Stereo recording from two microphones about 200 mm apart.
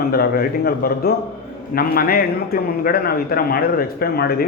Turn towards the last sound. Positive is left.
turn(degrees=50)  # may be behind; listen again after turning